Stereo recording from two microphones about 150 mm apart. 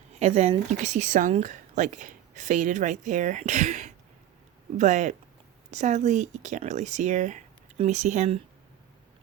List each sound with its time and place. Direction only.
0.1 s speech: 45° right (ahead or behind); by 1.3 s 60° right (ahead or behind)
1.3 s speech: 50° right (ahead or behind)